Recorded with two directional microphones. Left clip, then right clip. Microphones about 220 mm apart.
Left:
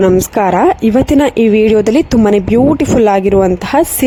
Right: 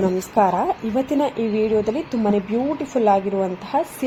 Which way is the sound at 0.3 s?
45° left (ahead or behind).